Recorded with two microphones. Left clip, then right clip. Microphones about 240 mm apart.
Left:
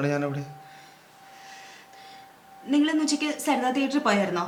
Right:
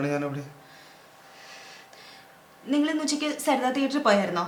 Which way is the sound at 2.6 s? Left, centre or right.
Centre.